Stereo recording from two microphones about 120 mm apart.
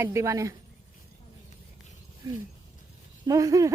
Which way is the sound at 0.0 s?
25° right (ahead or behind).